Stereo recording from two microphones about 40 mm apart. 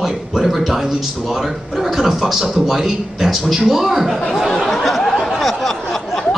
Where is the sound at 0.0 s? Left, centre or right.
Centre.